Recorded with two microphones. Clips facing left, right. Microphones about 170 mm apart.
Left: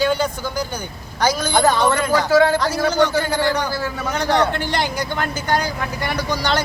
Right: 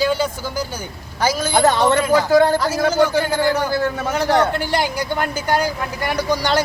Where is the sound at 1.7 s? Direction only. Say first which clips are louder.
Right 3 dB; 20° right (ahead or behind).